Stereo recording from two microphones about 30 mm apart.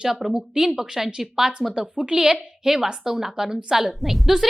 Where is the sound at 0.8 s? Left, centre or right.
Centre.